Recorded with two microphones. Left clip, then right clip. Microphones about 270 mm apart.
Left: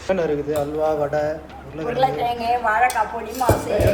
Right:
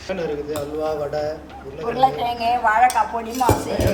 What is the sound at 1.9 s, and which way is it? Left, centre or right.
Speech, centre.